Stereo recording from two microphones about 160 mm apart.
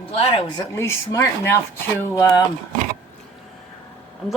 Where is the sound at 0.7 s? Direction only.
15° left (ahead or behind).